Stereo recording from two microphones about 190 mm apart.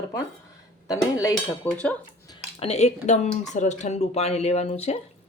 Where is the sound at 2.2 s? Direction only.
30° left (ahead or behind).